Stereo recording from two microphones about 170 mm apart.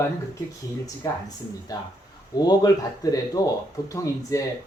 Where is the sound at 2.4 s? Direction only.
25° left (ahead or behind).